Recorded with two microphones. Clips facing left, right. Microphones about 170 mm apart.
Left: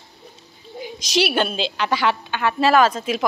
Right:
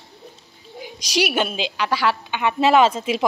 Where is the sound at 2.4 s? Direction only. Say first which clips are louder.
Right 1 dB; 20° right (ahead or behind).